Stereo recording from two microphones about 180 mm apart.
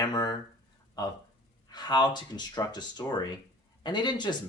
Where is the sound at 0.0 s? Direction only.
20° left (ahead or behind).